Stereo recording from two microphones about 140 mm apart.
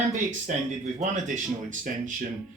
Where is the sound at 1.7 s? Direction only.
65° right (ahead or behind).